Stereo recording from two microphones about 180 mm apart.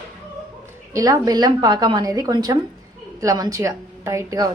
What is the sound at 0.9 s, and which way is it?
A woman's voice, 20° right (ahead or behind).